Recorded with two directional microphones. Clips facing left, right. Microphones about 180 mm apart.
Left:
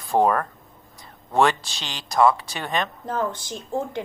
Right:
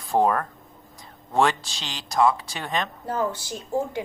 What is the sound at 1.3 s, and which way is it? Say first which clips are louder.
Speech: left 2 dB; 60° left (ahead or behind).